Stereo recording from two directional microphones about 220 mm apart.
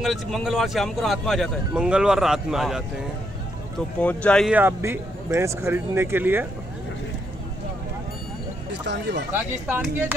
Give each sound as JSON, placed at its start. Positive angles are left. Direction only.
{"t": 0.0, "sound": "speech", "side_deg": 0}
{"t": 4.0, "sound": "speech", "side_deg": 5}
{"t": 4.6, "sound": "speech", "side_deg": -10}
{"t": 8.8, "sound": "speech", "side_deg": -50}
{"t": 9.3, "sound": "speech", "side_deg": -5}